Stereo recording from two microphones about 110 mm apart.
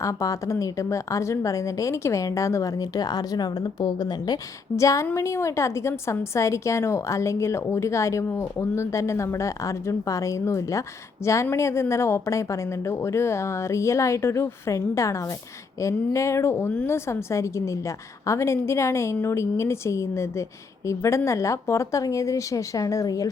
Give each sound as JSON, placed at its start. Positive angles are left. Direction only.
{"t": 0.0, "sound": "a woman's voice", "side_deg": 30}
{"t": 4.8, "sound": "a woman's voice", "side_deg": 30}